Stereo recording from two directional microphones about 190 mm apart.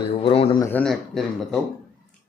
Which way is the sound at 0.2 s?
30° left (ahead or behind).